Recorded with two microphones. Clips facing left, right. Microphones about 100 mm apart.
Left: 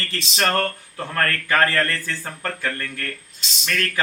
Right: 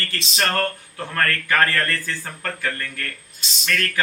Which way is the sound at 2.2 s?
5° left (ahead or behind).